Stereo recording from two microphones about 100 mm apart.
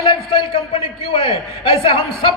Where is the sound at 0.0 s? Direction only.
65° left (ahead or behind).